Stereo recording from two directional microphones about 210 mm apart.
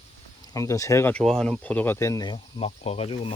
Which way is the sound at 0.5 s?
15° left (ahead or behind).